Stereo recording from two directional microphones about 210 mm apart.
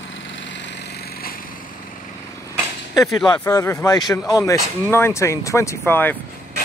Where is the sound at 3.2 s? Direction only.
15° left (ahead or behind).